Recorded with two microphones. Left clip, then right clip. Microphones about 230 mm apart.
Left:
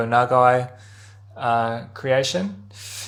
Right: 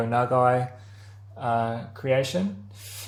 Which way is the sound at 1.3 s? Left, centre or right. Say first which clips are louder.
Left 5 dB; left.